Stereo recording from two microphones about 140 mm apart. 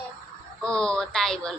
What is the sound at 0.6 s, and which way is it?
Speech, 5° left (ahead or behind).